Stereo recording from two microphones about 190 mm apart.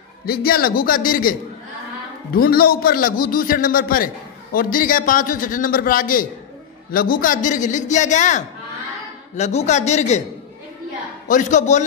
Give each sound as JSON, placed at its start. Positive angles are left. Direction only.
{"t": 0.2, "sound": "a man's voice", "side_deg": 55}
{"t": 2.3, "sound": "a man's voice", "side_deg": 50}
{"t": 11.2, "sound": "a man's voice", "side_deg": 40}